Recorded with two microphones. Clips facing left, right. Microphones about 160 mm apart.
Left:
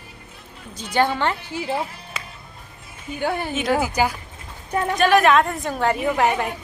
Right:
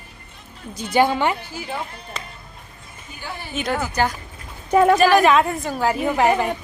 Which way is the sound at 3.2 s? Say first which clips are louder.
Left 10 dB; 55° left (ahead or behind).